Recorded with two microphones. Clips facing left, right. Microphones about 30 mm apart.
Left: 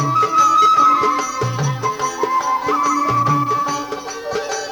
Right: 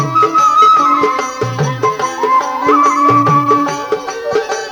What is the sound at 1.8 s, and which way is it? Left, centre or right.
Music, right.